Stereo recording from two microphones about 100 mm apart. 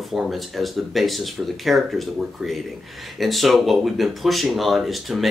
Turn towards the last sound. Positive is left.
turn(degrees=0)  # may be behind; listen again after turning